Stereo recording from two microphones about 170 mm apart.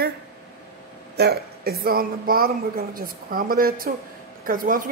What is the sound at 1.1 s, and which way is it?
Speech, 70° right (ahead or behind).